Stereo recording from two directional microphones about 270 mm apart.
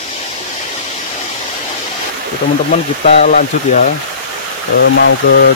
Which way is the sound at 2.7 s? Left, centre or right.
Left.